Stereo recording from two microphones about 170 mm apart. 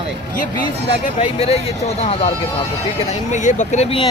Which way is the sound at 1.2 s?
35° left (ahead or behind).